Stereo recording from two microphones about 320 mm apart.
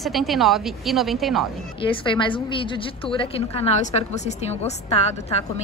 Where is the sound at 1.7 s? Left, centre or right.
Centre.